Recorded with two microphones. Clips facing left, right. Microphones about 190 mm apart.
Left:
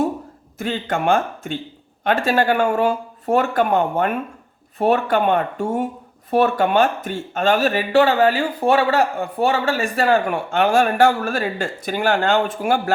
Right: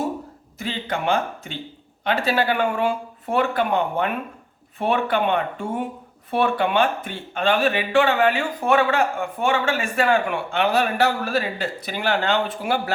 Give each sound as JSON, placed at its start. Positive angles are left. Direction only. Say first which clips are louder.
{"t": 0.6, "sound": "speech", "louder": "left 4 dB", "side_deg": 50}